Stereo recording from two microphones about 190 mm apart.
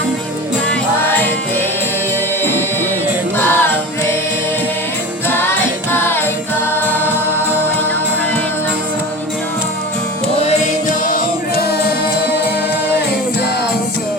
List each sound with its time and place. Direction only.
2.4 s music: 10° left (ahead or behind)
5.9 s music: 10° left (ahead or behind)
10.8 s music: 45° left (ahead or behind)